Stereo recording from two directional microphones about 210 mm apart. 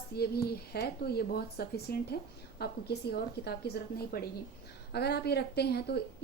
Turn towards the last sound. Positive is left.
turn(degrees=50)  # may be behind; listen again after turning